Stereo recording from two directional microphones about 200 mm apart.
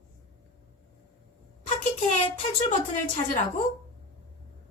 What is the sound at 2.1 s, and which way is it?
Speech, 35° left (ahead or behind).